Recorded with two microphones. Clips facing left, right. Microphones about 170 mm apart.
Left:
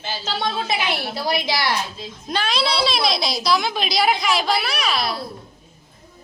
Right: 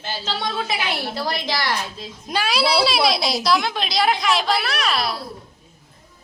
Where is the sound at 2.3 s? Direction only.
10° right (ahead or behind).